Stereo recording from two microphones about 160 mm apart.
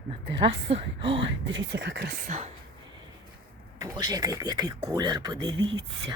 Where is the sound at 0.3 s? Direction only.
35° right (ahead or behind).